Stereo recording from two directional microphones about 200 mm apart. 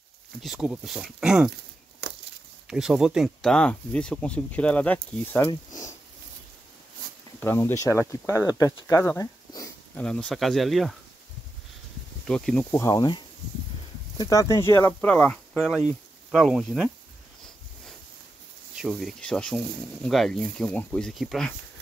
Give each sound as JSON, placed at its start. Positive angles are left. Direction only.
{"t": 0.4, "sound": "speech", "side_deg": 0}
{"t": 2.7, "sound": "speech", "side_deg": -5}
{"t": 7.3, "sound": "speech", "side_deg": 10}
{"t": 10.0, "sound": "speech", "side_deg": 5}
{"t": 12.3, "sound": "speech", "side_deg": 5}
{"t": 12.7, "sound": "speech", "side_deg": 15}
{"t": 18.8, "sound": "speech", "side_deg": 0}